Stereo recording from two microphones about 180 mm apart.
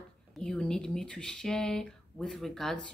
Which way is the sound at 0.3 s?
5° left (ahead or behind).